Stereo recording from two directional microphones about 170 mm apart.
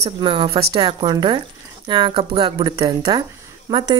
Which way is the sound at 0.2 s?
25° right (ahead or behind).